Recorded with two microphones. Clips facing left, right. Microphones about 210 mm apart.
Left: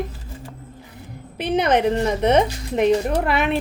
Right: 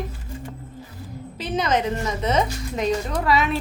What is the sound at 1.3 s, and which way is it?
A woman's voice, 60° left (ahead or behind).